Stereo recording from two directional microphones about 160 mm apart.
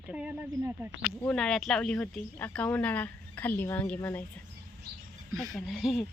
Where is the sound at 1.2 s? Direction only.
5° left (ahead or behind).